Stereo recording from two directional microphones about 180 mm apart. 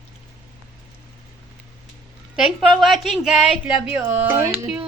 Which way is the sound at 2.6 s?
Centre (ahead or behind).